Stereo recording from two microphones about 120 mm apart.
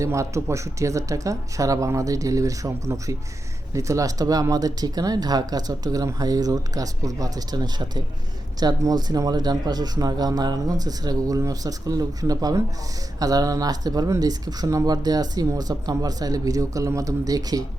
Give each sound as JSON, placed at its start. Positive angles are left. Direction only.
{"t": 0.0, "sound": "speech", "side_deg": -25}